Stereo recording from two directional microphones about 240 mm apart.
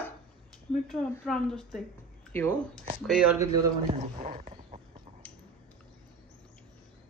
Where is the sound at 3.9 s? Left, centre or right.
Right.